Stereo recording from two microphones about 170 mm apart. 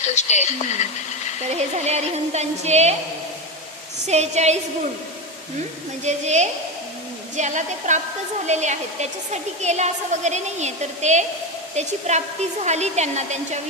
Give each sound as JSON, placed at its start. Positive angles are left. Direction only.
{"t": 0.1, "sound": "a woman's voice", "side_deg": 45}
{"t": 1.5, "sound": "speech", "side_deg": -40}
{"t": 4.0, "sound": "speech", "side_deg": -40}
{"t": 6.1, "sound": "a woman's voice", "side_deg": -40}